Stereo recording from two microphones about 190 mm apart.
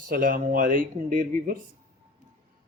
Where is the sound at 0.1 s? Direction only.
50° right (ahead or behind).